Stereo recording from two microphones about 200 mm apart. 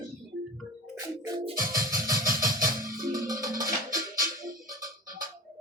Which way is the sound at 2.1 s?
45° right (ahead or behind).